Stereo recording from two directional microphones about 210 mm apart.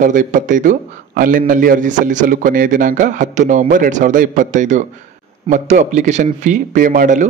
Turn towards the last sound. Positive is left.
turn(degrees=-40)  # may be behind; listen again after turning